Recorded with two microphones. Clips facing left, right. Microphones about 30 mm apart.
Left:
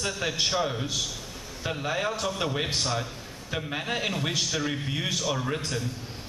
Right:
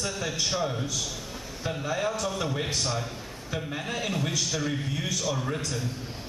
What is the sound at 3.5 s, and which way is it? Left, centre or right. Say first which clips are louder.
A man's voice: left 2 dB; left.